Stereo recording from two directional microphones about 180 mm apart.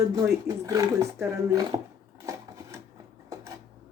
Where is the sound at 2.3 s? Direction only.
15° right (ahead or behind).